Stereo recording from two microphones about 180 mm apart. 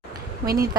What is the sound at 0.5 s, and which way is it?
Speech, 20° right (ahead or behind).